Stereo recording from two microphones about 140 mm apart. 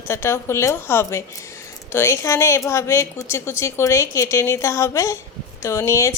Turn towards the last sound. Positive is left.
turn(degrees=20)  # may be behind; listen again after turning